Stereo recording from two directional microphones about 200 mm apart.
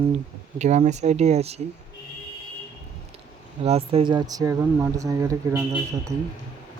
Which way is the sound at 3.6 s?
30° right (ahead or behind).